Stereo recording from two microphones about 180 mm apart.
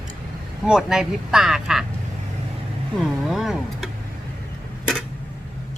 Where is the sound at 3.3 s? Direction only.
Centre (ahead or behind).